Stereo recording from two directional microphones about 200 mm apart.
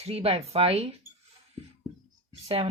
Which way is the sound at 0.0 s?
30° right (ahead or behind).